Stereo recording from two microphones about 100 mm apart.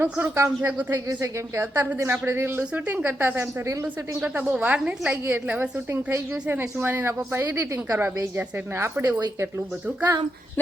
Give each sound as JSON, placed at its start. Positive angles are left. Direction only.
{"t": 0.0, "sound": "a woman's voice", "side_deg": -20}